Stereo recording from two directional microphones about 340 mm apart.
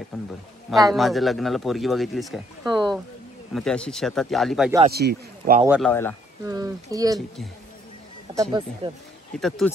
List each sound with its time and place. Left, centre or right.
0.1 s speech: centre
4.8 s speech: right
5.7 s speech: centre
6.4 s speech: centre
8.4 s speech: centre
9.3 s speech: centre